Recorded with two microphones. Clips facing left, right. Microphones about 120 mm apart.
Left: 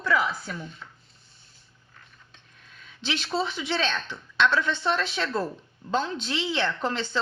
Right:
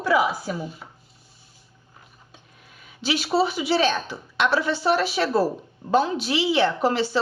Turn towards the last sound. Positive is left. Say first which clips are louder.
# right 6 dB
turn(degrees=-10)  # may be behind; listen again after turning